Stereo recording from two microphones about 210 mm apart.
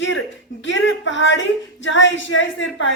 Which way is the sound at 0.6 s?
60° left (ahead or behind).